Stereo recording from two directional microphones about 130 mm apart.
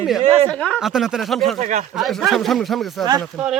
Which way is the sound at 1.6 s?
70° right (ahead or behind).